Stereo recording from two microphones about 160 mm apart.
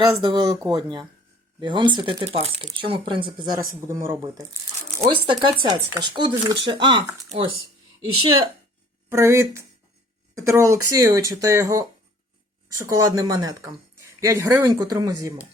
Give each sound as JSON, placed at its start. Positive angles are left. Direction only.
{"t": 0.0, "sound": "speech", "side_deg": -25}
{"t": 3.8, "sound": "speech", "side_deg": -15}
{"t": 5.6, "sound": "speech", "side_deg": -25}
{"t": 9.0, "sound": "speech", "side_deg": -15}